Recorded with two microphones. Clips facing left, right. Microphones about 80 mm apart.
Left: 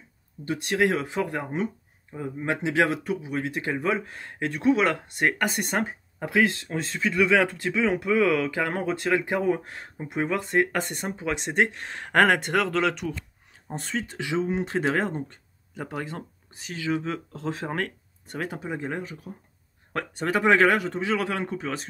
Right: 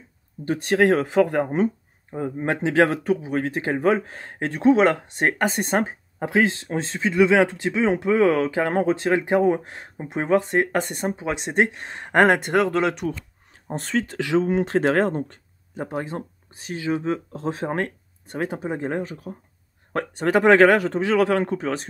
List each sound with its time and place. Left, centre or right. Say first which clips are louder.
0.5 s a man's voice: right 5 dB; right
13.7 s a man's voice: right 6 dB; right
15.7 s speech: right 5 dB; right
19.9 s a man's voice: right 5 dB; right